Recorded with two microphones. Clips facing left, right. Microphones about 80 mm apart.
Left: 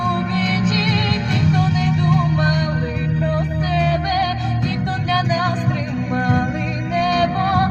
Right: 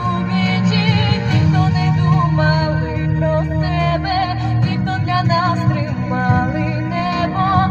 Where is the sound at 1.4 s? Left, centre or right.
Right.